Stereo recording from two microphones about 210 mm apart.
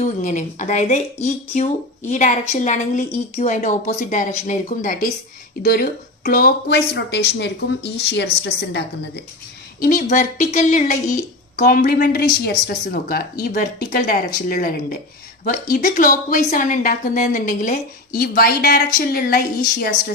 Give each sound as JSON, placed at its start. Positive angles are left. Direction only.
{"t": 0.0, "sound": "a woman's voice", "side_deg": 35}
{"t": 9.8, "sound": "a woman's voice", "side_deg": 40}